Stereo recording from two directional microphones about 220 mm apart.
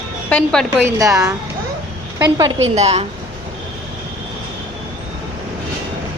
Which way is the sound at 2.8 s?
30° right (ahead or behind).